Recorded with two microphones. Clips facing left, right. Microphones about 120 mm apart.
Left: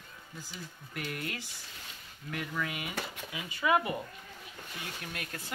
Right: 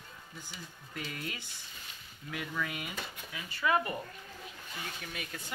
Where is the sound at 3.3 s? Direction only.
15° left (ahead or behind); by 5.4 s centre (ahead or behind).